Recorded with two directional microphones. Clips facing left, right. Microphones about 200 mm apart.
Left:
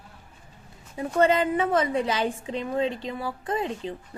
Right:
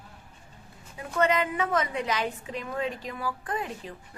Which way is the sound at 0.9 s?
30° left (ahead or behind).